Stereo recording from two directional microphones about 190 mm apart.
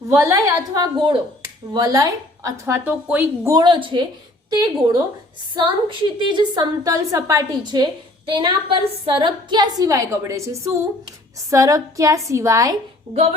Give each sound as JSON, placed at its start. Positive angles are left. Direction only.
{"t": 0.1, "sound": "a woman's voice", "side_deg": -15}
{"t": 11.5, "sound": "a woman's voice", "side_deg": -15}